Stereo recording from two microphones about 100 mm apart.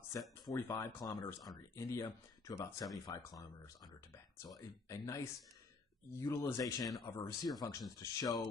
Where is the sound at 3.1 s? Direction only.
40° left (ahead or behind).